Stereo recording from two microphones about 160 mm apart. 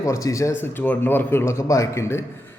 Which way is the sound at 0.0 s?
20° left (ahead or behind).